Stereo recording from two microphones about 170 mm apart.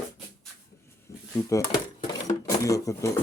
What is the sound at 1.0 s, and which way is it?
Dishes, 20° left (ahead or behind).